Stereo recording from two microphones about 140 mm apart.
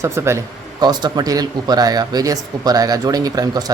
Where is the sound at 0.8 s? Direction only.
30° right (ahead or behind).